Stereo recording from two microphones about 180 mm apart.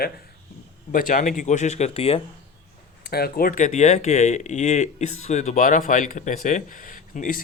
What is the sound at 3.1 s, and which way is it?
Speech, 60° left (ahead or behind).